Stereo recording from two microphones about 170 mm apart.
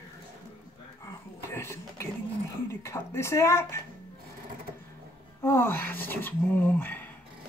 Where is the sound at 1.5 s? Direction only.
15° left (ahead or behind).